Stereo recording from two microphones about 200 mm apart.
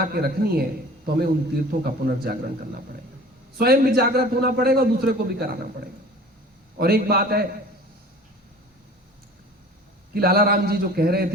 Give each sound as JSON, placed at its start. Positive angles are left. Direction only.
{"t": 0.1, "sound": "a man's voice", "side_deg": -50}
{"t": 3.6, "sound": "a man's voice", "side_deg": -50}
{"t": 6.7, "sound": "a man's voice", "side_deg": -50}
{"t": 10.2, "sound": "a man's voice", "side_deg": -50}